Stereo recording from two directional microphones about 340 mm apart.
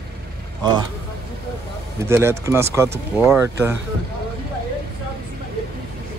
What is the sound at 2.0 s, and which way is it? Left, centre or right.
Speech, centre.